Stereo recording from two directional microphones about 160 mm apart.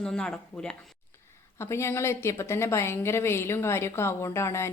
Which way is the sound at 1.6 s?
15° left (ahead or behind).